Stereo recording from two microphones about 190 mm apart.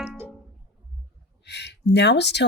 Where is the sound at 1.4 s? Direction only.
65° left (ahead or behind).